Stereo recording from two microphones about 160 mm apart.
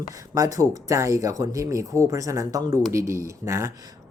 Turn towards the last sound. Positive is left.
turn(degrees=-15)  # may be behind; listen again after turning